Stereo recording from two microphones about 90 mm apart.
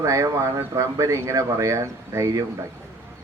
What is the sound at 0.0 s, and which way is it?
A man's voice, 35° right (ahead or behind).